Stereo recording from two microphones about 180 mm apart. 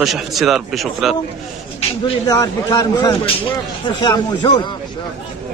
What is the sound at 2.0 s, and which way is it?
A man's voice, 20° left (ahead or behind).